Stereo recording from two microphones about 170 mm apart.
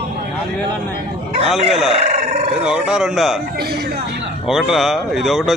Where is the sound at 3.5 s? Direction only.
70° right (ahead or behind).